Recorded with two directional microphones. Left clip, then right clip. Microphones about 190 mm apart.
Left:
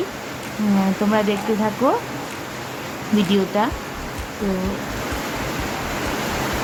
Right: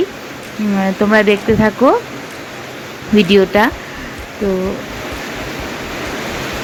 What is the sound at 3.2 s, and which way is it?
Speech, 20° right (ahead or behind).